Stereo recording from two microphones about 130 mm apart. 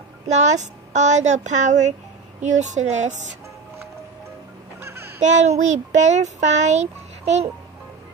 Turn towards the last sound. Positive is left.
turn(degrees=-60)  # may be behind; listen again after turning